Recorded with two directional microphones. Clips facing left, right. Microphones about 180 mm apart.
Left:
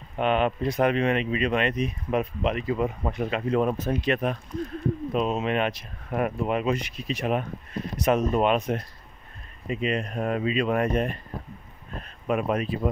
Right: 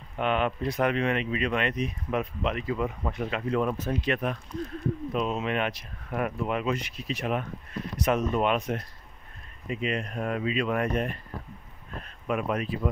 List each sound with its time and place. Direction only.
0.2 s speech: 25° left (ahead or behind)